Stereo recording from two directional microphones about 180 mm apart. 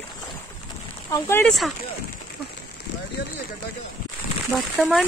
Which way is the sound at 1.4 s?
Centre (ahead or behind).